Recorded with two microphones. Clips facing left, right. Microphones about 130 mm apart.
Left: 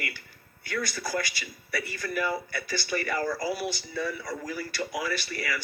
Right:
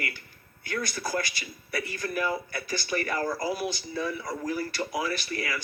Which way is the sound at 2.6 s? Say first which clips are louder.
Even; 50° right (ahead or behind).